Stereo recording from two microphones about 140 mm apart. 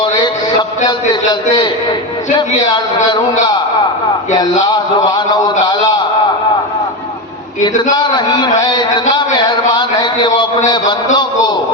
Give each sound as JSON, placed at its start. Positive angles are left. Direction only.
{"t": 0.9, "sound": "a man's voice", "side_deg": 30}
{"t": 4.6, "sound": "a man's voice", "side_deg": 30}
{"t": 7.9, "sound": "a man's voice", "side_deg": 30}
{"t": 8.6, "sound": "a sound", "side_deg": 30}
{"t": 10.7, "sound": "a man's voice", "side_deg": 30}